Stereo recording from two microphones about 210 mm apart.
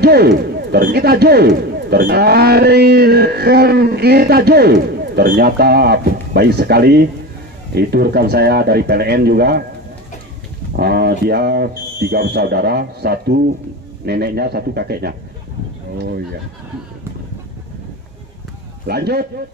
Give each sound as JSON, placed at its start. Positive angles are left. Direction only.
{"t": 0.0, "sound": "speech", "side_deg": -50}
{"t": 10.8, "sound": "speech", "side_deg": -50}
{"t": 18.9, "sound": "speech", "side_deg": -50}